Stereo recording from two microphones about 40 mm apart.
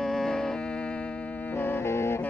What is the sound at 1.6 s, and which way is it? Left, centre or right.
Saxophone, left.